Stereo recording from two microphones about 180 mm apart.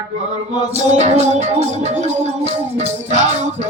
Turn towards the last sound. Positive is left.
turn(degrees=-40)  # may be behind; listen again after turning